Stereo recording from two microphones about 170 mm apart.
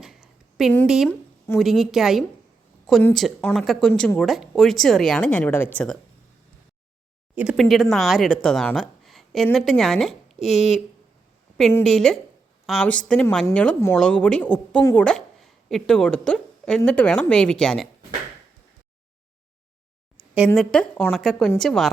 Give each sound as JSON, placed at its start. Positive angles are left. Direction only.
{"t": 0.0, "sound": "a sound", "side_deg": 0}
{"t": 0.9, "sound": "speech", "side_deg": 0}
{"t": 7.3, "sound": "speech", "side_deg": 0}
{"t": 20.5, "sound": "speech", "side_deg": 5}